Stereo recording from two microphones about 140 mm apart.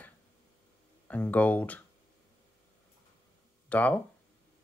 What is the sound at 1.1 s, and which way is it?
Speech, 10° left (ahead or behind).